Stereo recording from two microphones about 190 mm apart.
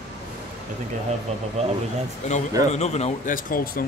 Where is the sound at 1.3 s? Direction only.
35° right (ahead or behind).